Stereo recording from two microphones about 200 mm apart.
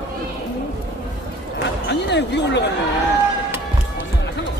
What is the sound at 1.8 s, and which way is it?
Basketball bounce, 60° left (ahead or behind).